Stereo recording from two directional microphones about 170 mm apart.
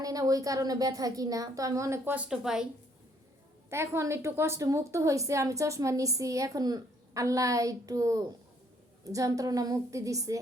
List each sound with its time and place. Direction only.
0.0 s a woman's voice: 20° right (ahead or behind); by 2.6 s 5° right (ahead or behind)
3.7 s a woman's voice: 15° right (ahead or behind)